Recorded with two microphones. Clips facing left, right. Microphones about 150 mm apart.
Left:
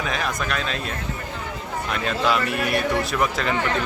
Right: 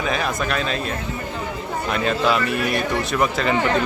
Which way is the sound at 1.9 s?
Centre (ahead or behind).